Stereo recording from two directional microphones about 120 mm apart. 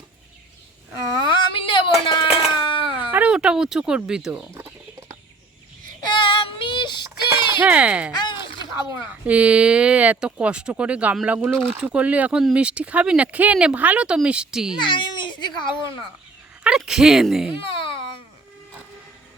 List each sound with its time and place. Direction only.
1.2 s a sound: 45° left (ahead or behind)
3.1 s speech: 10° right (ahead or behind)
4.5 s chicken: 25° right (ahead or behind)
6.1 s child singing: 45° left (ahead or behind)
7.6 s speech: 10° right (ahead or behind)
8.1 s a sound: 40° left (ahead or behind)
9.2 s speech: 10° right (ahead or behind)
14.8 s speech: 40° left (ahead or behind)
16.6 s speech: 5° right (ahead or behind)
17.5 s baby cry: 45° left (ahead or behind)